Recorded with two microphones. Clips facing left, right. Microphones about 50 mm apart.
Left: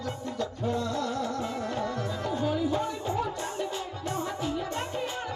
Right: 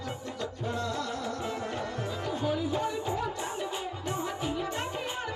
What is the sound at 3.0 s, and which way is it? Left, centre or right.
Music, centre.